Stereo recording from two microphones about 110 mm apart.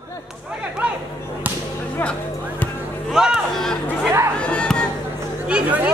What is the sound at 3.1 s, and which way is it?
Music, 5° right (ahead or behind).